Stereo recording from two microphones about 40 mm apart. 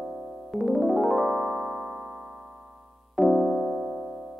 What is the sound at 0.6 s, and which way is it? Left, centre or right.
Keyboard, centre.